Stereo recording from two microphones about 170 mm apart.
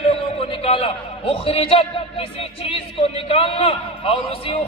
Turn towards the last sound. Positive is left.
turn(degrees=35)  # may be behind; listen again after turning